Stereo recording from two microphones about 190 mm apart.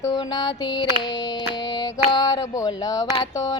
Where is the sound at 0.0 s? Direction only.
20° left (ahead or behind).